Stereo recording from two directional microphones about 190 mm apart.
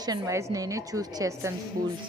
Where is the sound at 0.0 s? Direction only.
20° right (ahead or behind).